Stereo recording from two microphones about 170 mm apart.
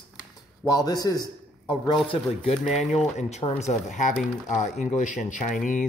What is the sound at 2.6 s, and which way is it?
Speech, centre (ahead or behind).